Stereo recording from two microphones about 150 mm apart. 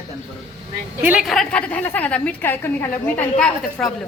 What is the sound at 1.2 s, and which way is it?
A woman's voice, centre (ahead or behind).